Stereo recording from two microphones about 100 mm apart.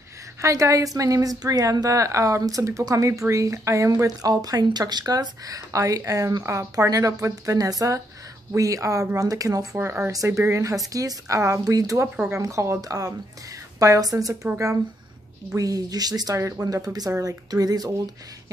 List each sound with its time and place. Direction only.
0.4 s a woman's voice: 30° right (ahead or behind)
15.5 s a woman's voice: 40° right (ahead or behind)